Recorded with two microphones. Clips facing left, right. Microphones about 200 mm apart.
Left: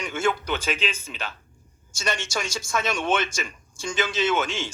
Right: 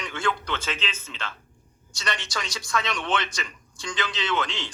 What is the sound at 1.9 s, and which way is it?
A man's voice, 25° left (ahead or behind).